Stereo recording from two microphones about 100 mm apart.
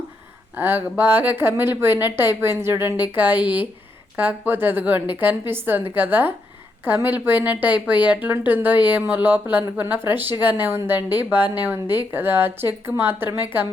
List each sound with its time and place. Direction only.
0.5 s a woman's voice: 20° right (ahead or behind)